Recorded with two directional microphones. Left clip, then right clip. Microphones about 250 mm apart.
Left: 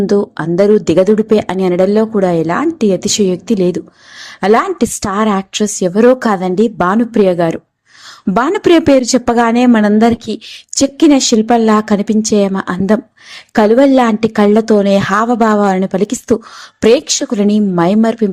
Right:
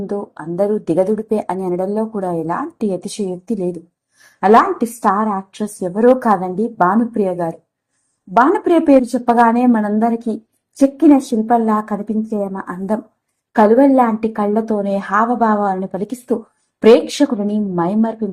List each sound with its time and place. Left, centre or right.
0.1 s a woman's voice: left
4.4 s a woman's voice: left